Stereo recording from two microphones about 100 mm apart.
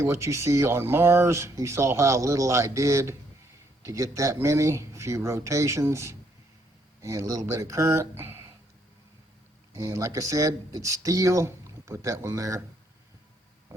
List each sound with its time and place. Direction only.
0.0 s speech: 30° right (ahead or behind)
9.7 s speech: 35° right (ahead or behind)